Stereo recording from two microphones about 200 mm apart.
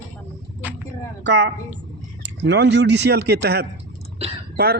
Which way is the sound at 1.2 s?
60° right (ahead or behind).